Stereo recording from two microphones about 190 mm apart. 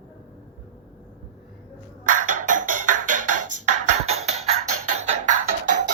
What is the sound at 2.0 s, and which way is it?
Music, 45° right (ahead or behind).